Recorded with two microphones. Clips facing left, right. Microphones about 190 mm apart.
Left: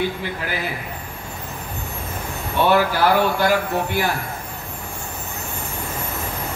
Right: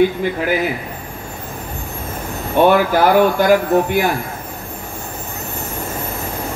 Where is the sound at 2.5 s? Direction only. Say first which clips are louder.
Right 5 dB; 50° right (ahead or behind).